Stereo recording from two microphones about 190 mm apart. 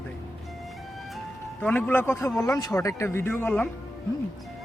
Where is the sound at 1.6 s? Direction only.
5° left (ahead or behind).